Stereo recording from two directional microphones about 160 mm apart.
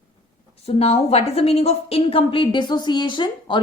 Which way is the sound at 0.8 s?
40° left (ahead or behind).